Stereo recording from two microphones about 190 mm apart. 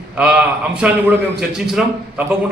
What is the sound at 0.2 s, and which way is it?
A man's voice, 5° right (ahead or behind).